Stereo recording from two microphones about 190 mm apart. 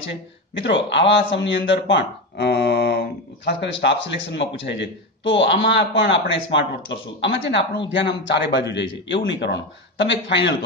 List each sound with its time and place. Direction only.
0.6 s speech: 70° left (ahead or behind)